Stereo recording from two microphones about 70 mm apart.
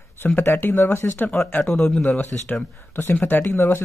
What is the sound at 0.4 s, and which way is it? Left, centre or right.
Speech, left.